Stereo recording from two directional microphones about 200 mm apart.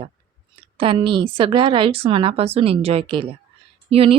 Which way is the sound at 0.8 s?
25° right (ahead or behind).